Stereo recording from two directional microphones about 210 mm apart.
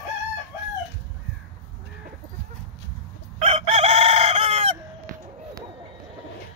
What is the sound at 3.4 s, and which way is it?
Chicken, 30° right (ahead or behind).